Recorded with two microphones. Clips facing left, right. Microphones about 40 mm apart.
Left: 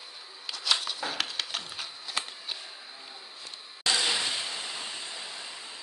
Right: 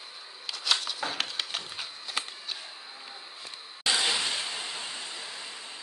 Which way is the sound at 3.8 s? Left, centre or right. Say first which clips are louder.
Even; centre.